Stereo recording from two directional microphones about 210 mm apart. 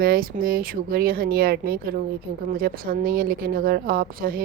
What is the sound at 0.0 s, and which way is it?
A woman's voice, 45° right (ahead or behind).